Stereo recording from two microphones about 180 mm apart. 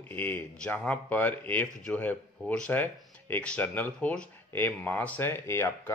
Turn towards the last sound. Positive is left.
turn(degrees=15)  # may be behind; listen again after turning